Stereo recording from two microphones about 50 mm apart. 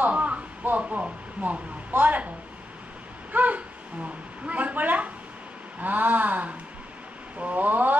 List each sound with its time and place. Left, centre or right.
0.0 s a sound: right
0.7 s a woman's voice: right
3.3 s a woman's voice: right